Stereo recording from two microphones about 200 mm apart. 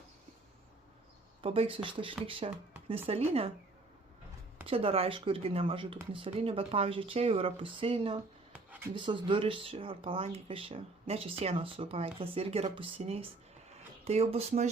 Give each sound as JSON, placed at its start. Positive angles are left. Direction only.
{"t": 1.4, "sound": "speech", "side_deg": -30}
{"t": 4.6, "sound": "speech", "side_deg": -30}
{"t": 8.5, "sound": "a sound", "side_deg": -10}
{"t": 9.0, "sound": "speech", "side_deg": -25}